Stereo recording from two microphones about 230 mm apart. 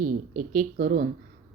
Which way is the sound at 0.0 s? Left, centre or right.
Right.